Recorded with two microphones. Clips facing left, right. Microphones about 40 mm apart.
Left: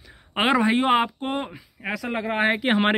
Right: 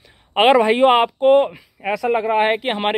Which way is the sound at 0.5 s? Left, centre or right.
Right.